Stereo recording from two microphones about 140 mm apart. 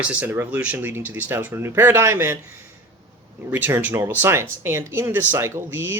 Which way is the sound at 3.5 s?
15° right (ahead or behind).